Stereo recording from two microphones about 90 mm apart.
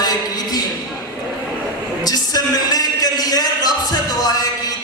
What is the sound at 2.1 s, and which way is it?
Music, 45° left (ahead or behind).